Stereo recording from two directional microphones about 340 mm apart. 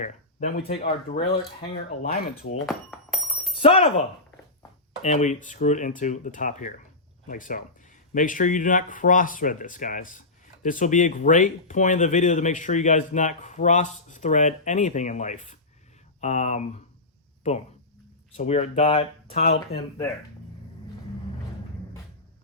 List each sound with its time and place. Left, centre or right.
0.0 s speech: left
2.0 s speech: left
2.6 s a sound: centre
3.6 s speech: centre
5.0 s speech: left
18.3 s speech: centre